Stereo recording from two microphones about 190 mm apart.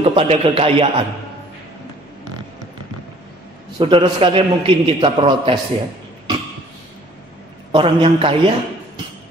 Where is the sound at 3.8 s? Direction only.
30° right (ahead or behind).